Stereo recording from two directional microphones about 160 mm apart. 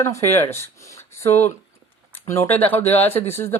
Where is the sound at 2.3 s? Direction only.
10° left (ahead or behind).